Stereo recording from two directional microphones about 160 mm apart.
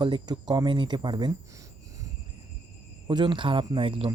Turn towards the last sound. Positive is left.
turn(degrees=-30)  # may be behind; listen again after turning